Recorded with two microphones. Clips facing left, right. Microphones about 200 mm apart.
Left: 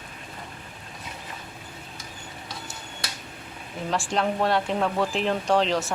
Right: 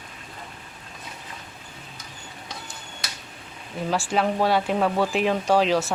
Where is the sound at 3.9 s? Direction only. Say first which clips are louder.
Right 2 dB; 5° right (ahead or behind).